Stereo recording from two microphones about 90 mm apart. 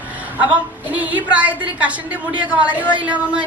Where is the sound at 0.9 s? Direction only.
15° right (ahead or behind).